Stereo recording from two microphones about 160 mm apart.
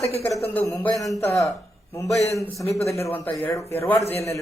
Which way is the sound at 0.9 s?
Centre (ahead or behind).